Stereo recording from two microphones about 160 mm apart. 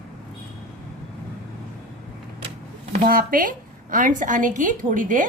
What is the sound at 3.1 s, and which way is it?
A woman's voice, 60° right (ahead or behind).